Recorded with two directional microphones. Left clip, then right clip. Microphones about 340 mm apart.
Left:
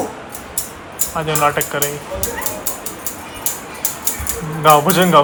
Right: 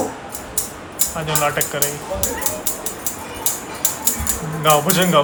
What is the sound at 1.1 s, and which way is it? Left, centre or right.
Speech, centre.